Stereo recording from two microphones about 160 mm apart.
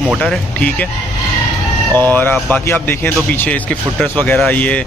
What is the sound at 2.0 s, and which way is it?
Speech, 10° left (ahead or behind).